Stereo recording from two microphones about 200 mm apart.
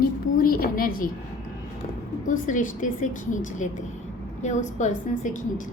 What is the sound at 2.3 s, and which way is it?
Speech, 40° left (ahead or behind).